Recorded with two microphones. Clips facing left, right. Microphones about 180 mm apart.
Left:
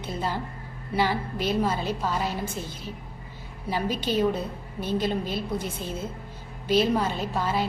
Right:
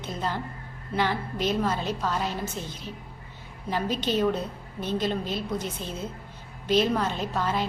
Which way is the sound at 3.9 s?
10° left (ahead or behind).